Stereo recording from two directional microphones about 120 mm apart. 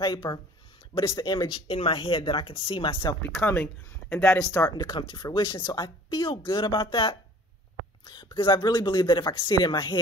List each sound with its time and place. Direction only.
0.0 s speech: 40° left (ahead or behind)
3.3 s speech: 15° left (ahead or behind); by 9.9 s 40° left (ahead or behind)